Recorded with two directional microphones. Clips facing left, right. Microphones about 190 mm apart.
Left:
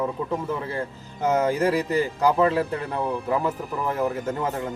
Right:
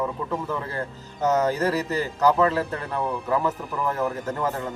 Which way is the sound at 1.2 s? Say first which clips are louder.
Even; 10° left (ahead or behind).